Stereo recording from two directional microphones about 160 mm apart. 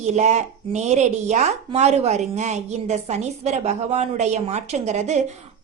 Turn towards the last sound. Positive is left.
turn(degrees=-45)  # may be behind; listen again after turning